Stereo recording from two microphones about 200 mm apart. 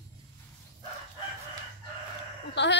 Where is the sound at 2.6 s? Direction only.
60° left (ahead or behind).